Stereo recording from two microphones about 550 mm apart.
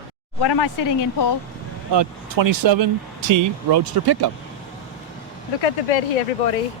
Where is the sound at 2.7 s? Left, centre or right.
Right.